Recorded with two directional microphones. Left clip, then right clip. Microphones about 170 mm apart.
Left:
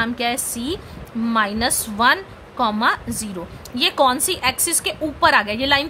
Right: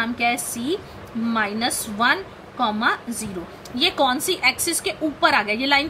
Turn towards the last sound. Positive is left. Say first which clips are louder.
# left 2 dB
turn(degrees=35)  # may be behind; listen again after turning